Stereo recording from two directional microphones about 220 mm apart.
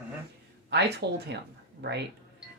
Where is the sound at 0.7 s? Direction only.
50° right (ahead or behind).